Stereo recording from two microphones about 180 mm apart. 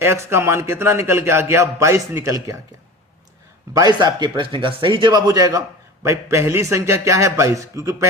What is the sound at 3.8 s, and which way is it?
Speech, 25° right (ahead or behind).